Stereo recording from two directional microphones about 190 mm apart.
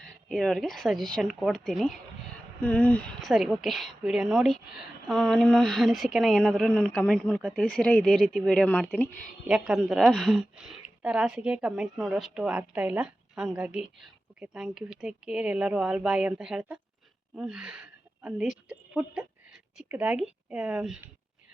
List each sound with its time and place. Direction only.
0.3 s a woman's voice: centre (ahead or behind)